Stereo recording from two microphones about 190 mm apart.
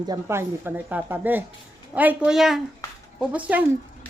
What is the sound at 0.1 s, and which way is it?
A woman's voice, 15° right (ahead or behind).